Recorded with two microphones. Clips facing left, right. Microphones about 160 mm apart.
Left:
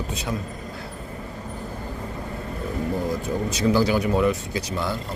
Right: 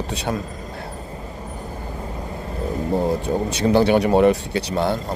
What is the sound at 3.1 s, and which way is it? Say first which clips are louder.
Speech: right 4 dB; 65° right (ahead or behind).